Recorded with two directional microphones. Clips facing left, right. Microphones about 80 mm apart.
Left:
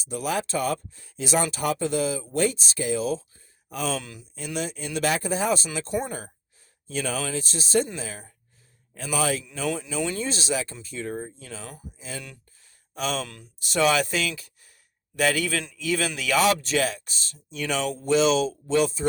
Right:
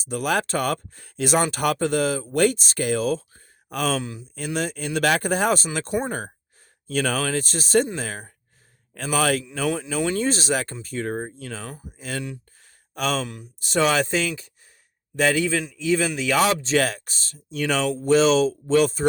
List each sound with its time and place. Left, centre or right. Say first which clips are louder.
0.0 s speech: right 4 dB; right
4.0 s a man's voice: right 9 dB; right
4.4 s speech: right 4 dB; right
4.9 s a man's voice: right 4 dB; right
9.6 s a man's voice: right 3 dB; right
12.6 s a sound: right 3 dB; right
13.2 s a man's voice: right 7 dB; centre
13.6 s a man's voice: right 1 dB; right
16.3 s speech: right 1 dB; right